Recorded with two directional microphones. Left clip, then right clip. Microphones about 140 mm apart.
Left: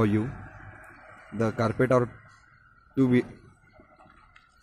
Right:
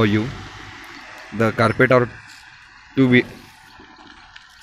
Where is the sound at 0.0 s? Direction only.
15° left (ahead or behind).